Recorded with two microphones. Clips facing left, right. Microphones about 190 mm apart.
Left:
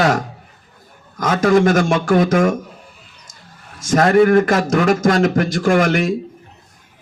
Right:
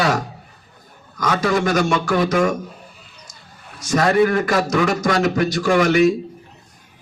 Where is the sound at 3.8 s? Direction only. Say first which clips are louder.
Left 3 dB; 50° left (ahead or behind).